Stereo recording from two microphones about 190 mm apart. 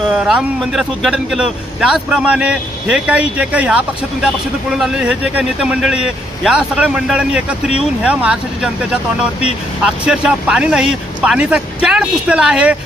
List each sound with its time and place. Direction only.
0.1 s speech: centre (ahead or behind)
4.8 s speech: 5° right (ahead or behind)